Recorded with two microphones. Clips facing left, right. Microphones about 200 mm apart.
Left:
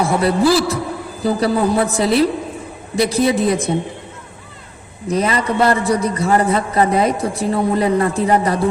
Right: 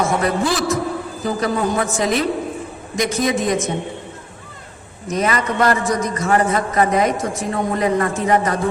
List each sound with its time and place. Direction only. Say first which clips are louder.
0.0 s a man's voice: left 4 dB; 35° left (ahead or behind)
5.0 s a man's voice: left 2 dB; 30° left (ahead or behind)